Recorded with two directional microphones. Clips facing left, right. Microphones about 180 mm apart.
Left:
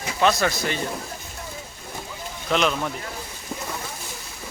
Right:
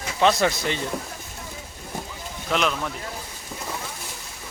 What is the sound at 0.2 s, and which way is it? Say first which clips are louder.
Speech: right 1 dB; 20° right (ahead or behind).